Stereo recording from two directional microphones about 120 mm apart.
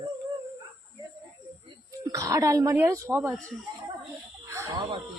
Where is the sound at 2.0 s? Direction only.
25° right (ahead or behind).